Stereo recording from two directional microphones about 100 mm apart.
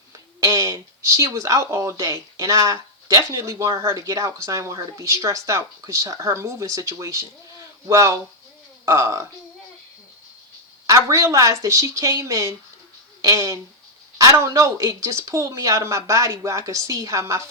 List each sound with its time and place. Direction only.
0.3 s a sound: 35° right (ahead or behind)
2.0 s speech: 35° right (ahead or behind)
10.8 s speech: 35° right (ahead or behind)